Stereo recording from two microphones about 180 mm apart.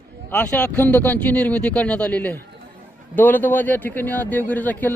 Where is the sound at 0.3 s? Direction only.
10° left (ahead or behind).